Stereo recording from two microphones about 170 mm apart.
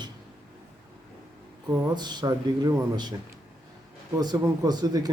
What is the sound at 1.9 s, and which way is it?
Speech, 25° right (ahead or behind).